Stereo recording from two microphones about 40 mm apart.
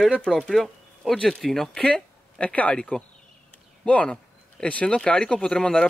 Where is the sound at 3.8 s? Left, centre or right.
Left.